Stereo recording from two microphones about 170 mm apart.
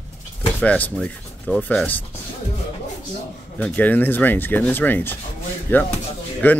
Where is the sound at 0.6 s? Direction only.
5° left (ahead or behind).